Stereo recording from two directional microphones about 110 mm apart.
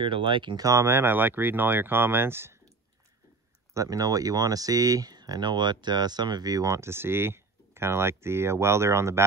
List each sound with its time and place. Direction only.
0.0 s speech: 50° right (ahead or behind)
0.7 s speech: 25° right (ahead or behind)
3.7 s speech: 30° right (ahead or behind)